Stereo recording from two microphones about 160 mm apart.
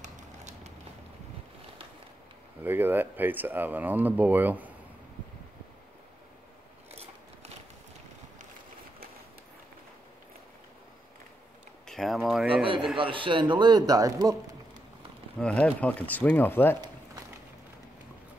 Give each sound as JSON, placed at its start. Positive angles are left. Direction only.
{"t": 0.0, "sound": "run", "side_deg": -45}
{"t": 2.6, "sound": "speech", "side_deg": -10}
{"t": 6.9, "sound": "scissors", "side_deg": -40}
{"t": 11.9, "sound": "speech", "side_deg": 0}
{"t": 12.9, "sound": "a man's voice", "side_deg": -30}
{"t": 15.3, "sound": "speech", "side_deg": 5}